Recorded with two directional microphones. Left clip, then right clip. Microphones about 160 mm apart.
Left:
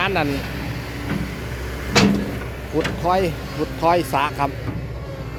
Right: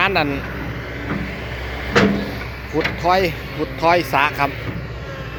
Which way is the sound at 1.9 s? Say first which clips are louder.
Right 1 dB; 90° left.